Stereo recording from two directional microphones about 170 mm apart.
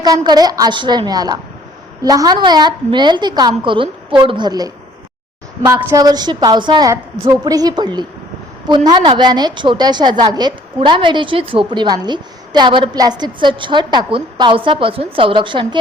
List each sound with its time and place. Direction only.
0.0 s a woman's voice: 25° right (ahead or behind)